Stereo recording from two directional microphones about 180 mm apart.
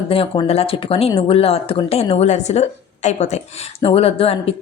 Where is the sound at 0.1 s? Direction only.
30° left (ahead or behind).